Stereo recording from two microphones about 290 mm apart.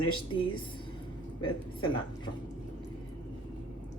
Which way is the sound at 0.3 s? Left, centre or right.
Centre.